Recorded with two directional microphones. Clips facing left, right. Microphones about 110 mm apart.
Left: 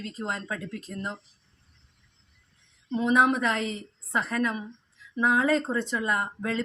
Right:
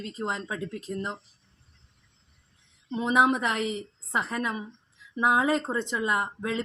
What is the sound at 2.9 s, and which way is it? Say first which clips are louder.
Speech: left 1 dB; 20° right (ahead or behind).